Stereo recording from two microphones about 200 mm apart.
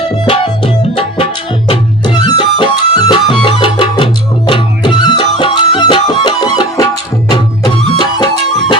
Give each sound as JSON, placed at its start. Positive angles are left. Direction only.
{"t": 0.3, "sound": "music", "side_deg": 25}